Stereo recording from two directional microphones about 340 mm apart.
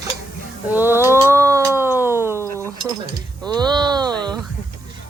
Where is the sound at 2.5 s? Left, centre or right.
Centre.